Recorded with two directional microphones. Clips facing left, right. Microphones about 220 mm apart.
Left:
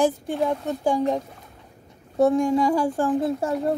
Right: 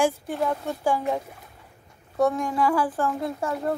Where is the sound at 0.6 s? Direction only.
20° left (ahead or behind).